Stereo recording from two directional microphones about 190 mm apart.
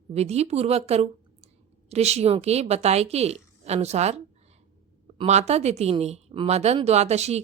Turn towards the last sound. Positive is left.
turn(degrees=-35)  # may be behind; listen again after turning